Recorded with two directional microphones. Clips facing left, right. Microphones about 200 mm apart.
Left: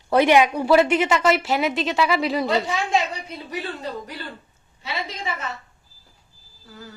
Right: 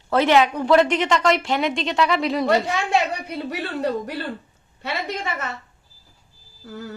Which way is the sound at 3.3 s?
65° right (ahead or behind).